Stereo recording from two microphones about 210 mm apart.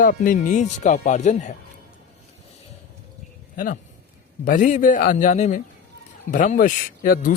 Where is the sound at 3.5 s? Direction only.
40° left (ahead or behind).